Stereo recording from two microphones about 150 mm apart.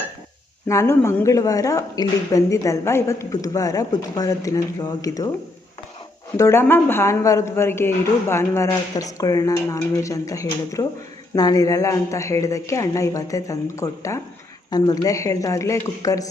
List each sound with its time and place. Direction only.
0.7 s speech: 20° left (ahead or behind)
6.3 s speech: 20° left (ahead or behind)